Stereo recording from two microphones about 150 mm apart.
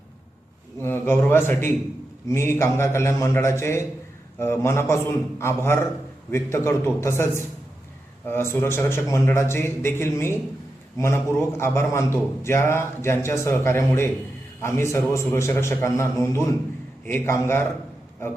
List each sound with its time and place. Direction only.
0.8 s a man's voice: 15° left (ahead or behind)